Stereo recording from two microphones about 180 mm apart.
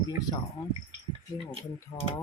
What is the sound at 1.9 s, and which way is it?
Speech, 20° left (ahead or behind).